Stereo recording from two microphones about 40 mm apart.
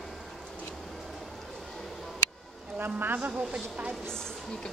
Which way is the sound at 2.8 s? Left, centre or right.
Right.